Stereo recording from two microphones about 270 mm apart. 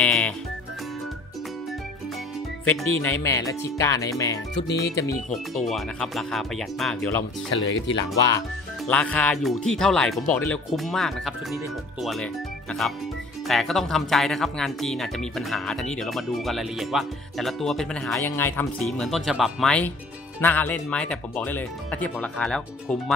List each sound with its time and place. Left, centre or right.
0.0 s music: centre
2.6 s speech: centre
4.6 s speech: left
5.3 s speech: centre
7.5 s speech: left
8.3 s speech: centre